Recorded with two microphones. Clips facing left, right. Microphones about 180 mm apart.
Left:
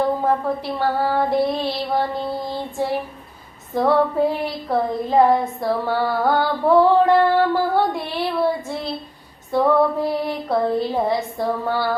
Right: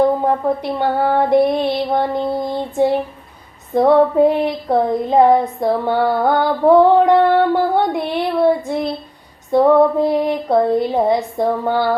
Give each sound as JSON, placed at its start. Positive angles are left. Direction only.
{"t": 0.2, "sound": "child singing", "side_deg": -20}
{"t": 9.5, "sound": "child singing", "side_deg": -20}